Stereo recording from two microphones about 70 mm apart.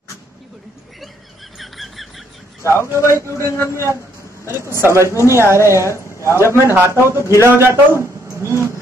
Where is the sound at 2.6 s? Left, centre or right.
Left.